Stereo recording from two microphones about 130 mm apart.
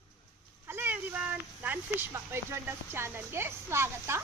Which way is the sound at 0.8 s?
15° right (ahead or behind).